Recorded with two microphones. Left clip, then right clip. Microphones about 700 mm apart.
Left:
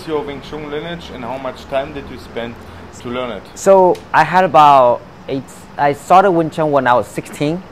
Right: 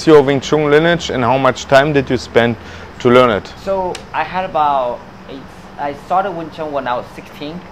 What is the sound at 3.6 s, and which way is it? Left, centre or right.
Speech, left.